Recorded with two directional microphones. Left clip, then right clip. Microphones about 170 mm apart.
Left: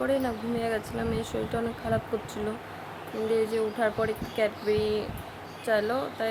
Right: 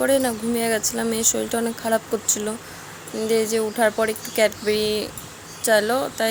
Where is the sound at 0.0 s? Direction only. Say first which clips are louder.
Right 8 dB; 50° right (ahead or behind).